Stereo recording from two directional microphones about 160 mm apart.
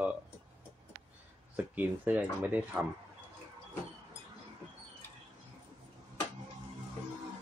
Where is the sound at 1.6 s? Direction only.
10° right (ahead or behind).